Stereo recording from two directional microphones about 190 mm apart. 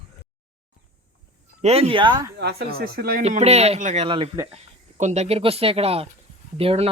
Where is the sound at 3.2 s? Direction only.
35° right (ahead or behind).